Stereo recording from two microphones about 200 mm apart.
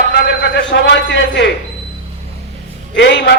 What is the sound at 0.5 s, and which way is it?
A man's voice, 60° left (ahead or behind).